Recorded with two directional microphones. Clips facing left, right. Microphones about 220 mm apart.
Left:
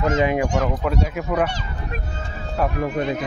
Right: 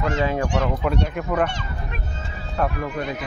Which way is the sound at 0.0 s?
20° left (ahead or behind).